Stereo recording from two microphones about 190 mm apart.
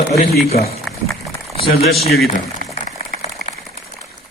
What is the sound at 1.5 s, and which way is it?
Speech, 30° left (ahead or behind).